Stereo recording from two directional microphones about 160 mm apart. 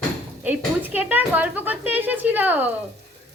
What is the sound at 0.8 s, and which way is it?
Speech, 10° right (ahead or behind).